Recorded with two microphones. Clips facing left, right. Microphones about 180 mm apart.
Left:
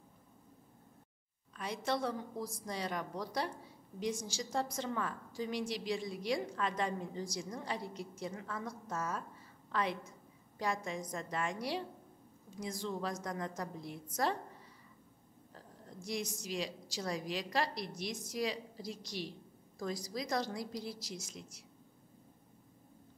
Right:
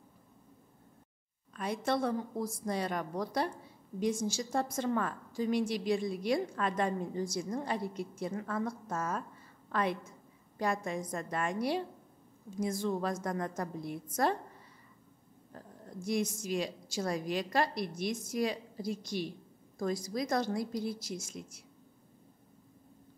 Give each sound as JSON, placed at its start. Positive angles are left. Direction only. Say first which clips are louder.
{"t": 1.5, "sound": "a woman's voice", "louder": "right 4 dB", "side_deg": -50}
{"t": 15.5, "sound": "a woman's voice", "louder": "right 6 dB", "side_deg": -55}